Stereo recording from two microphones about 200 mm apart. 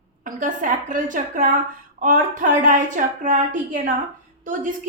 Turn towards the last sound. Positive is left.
turn(degrees=-40)  # may be behind; listen again after turning